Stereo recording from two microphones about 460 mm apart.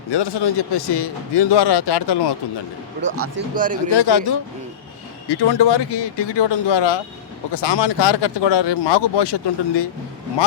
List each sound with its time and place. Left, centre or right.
0.1 s speech: left
3.0 s speech: right
3.9 s speech: left